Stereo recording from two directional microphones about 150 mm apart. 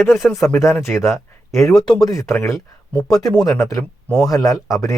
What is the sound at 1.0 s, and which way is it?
Speech, 20° left (ahead or behind).